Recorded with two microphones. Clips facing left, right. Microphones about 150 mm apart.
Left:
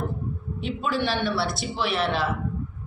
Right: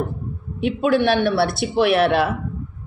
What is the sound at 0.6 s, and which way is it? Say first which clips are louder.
A woman's voice: right 9 dB; 60° right (ahead or behind).